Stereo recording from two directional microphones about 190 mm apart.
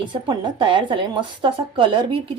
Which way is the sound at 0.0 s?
25° right (ahead or behind).